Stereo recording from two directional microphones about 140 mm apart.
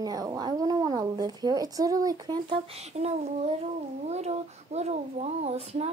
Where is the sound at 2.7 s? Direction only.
50° right (ahead or behind).